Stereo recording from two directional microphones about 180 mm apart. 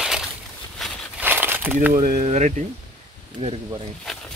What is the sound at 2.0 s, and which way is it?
Speech, 50° right (ahead or behind).